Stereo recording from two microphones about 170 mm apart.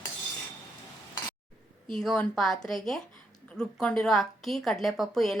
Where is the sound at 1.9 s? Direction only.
5° left (ahead or behind).